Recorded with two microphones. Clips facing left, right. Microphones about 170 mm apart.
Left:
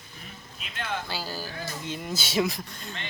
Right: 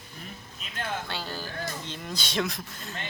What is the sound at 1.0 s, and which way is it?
Speech, 5° left (ahead or behind).